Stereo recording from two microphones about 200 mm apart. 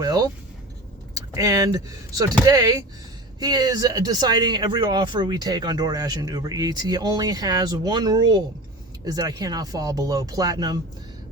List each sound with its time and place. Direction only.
0.0 s speech: 20° right (ahead or behind)